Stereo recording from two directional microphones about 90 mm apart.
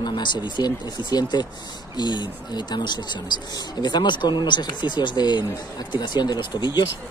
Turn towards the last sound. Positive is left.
turn(degrees=55)  # may be behind; listen again after turning